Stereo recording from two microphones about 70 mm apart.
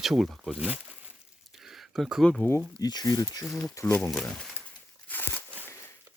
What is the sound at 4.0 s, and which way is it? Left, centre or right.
Speech, centre.